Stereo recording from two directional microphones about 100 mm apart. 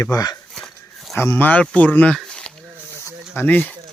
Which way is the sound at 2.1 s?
10° left (ahead or behind).